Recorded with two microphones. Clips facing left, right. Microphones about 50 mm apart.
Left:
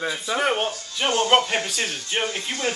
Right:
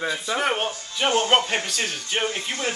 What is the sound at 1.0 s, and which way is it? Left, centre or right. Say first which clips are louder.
Speech: right 1 dB; centre.